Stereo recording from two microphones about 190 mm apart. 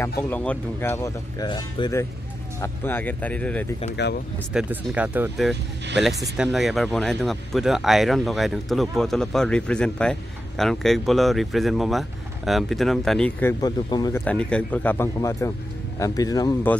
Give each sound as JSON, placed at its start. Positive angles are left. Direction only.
{"t": 0.0, "sound": "speech", "side_deg": 10}
{"t": 3.9, "sound": "speech", "side_deg": 60}
{"t": 4.6, "sound": "speech", "side_deg": -5}
{"t": 14.2, "sound": "speech", "side_deg": 5}